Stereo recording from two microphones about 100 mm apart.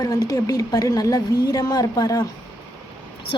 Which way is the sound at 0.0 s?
40° left (ahead or behind).